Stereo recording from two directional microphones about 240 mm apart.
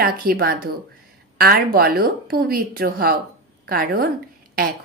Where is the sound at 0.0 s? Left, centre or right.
Right.